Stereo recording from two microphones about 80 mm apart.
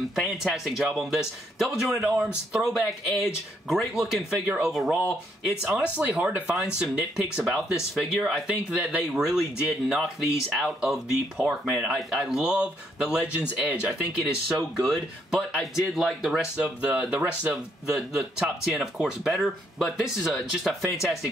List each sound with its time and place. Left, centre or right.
0.2 s speech: centre
2.6 s speech: centre
5.8 s speech: centre
6.5 s speech: centre
17.5 s speech: centre